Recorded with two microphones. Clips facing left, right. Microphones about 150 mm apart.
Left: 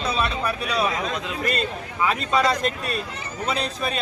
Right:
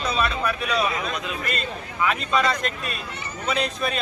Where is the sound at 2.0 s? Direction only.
35° left (ahead or behind).